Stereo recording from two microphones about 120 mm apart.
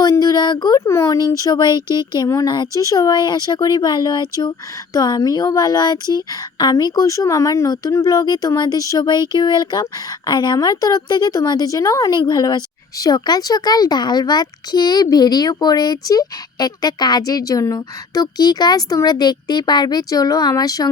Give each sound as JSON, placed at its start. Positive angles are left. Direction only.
{"t": 0.0, "sound": "a sound", "side_deg": 35}
{"t": 0.9, "sound": "speech", "side_deg": 25}
{"t": 12.1, "sound": "speech", "side_deg": 40}